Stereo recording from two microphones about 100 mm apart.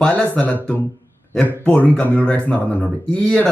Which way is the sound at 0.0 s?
10° left (ahead or behind).